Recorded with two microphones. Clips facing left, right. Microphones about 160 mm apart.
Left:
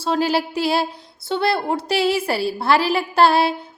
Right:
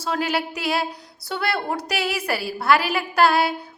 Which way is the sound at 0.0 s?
30° left (ahead or behind).